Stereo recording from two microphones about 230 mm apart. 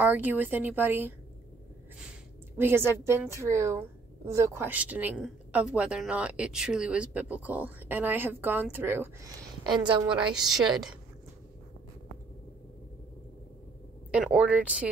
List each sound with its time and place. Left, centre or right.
0.0 s a woman's voice: centre
2.5 s a woman's voice: centre
10.1 s a woman's voice: centre
14.1 s a woman's voice: centre